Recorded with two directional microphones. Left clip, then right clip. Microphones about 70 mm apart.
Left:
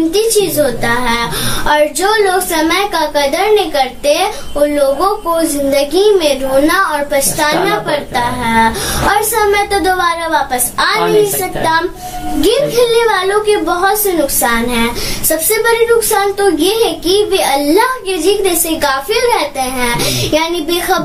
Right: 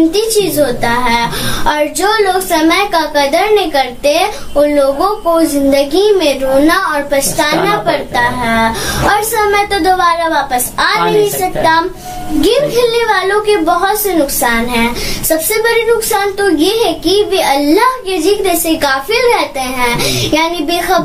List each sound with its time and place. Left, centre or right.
0.1 s a woman's voice: right
9.0 s a woman's voice: right